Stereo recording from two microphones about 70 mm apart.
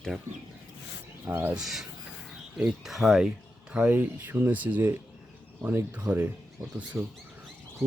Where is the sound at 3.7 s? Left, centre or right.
Right.